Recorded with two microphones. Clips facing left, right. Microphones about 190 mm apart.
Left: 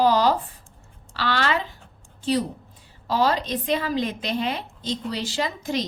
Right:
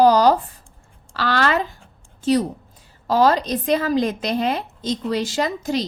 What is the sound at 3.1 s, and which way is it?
A woman's voice, 45° right (ahead or behind).